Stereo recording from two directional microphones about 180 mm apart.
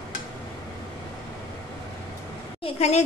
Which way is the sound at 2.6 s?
35° left (ahead or behind).